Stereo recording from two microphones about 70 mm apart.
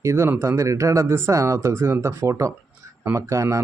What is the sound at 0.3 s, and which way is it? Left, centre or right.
Speech, right.